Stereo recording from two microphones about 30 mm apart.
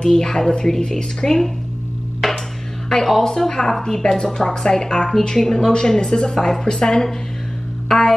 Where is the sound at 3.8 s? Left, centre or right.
Left.